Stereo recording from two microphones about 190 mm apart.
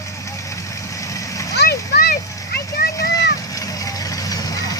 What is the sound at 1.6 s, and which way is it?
Vehicle, 55° left (ahead or behind).